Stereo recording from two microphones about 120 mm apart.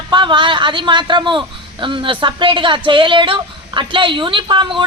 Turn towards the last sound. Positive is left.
turn(degrees=-40)  # may be behind; listen again after turning